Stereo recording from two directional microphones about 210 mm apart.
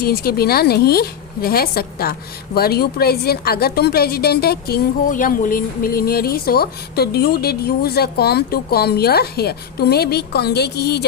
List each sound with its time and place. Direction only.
0.0 s a woman's voice: 45° left (ahead or behind)